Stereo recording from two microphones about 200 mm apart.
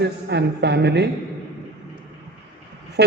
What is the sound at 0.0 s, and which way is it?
A woman's voice, 55° right (ahead or behind).